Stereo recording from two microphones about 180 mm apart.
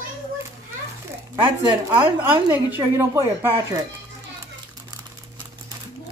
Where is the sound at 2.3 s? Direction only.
15° right (ahead or behind).